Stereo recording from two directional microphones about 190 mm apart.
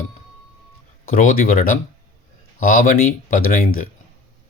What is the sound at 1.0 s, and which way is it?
Speech, 45° left (ahead or behind).